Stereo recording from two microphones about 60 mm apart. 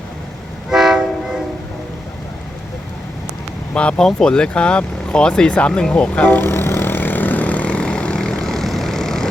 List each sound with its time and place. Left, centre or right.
0.7 s train: centre
3.8 s speech: centre
6.4 s vehicle: left; by 9.3 s centre